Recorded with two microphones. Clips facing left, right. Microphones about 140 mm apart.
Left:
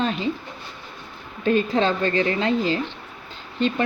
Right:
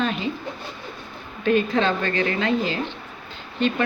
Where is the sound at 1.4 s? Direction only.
35° left (ahead or behind).